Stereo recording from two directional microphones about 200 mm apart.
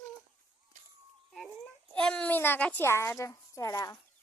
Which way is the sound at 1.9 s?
5° left (ahead or behind).